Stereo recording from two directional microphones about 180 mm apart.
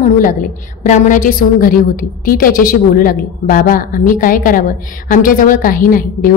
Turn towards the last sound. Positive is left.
turn(degrees=50)  # may be behind; listen again after turning